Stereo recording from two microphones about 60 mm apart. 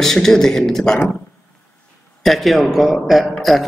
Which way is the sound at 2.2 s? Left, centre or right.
Centre.